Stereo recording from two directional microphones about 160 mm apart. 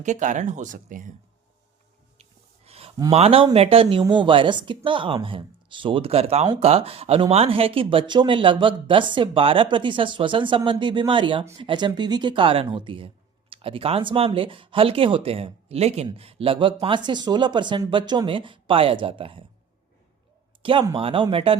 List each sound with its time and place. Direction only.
0.0 s speech: 50° right (ahead or behind)
2.6 s a sound: 40° right (ahead or behind)
3.1 s speech: 40° right (ahead or behind)
20.6 s speech: 30° right (ahead or behind)